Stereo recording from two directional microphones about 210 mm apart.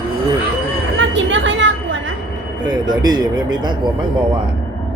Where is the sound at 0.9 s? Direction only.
60° right (ahead or behind).